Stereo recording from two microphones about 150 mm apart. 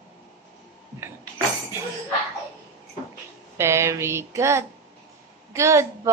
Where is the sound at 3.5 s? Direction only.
20° right (ahead or behind).